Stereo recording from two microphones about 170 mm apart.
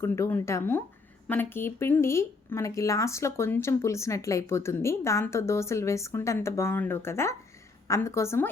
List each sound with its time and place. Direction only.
0.0 s speech: 15° left (ahead or behind)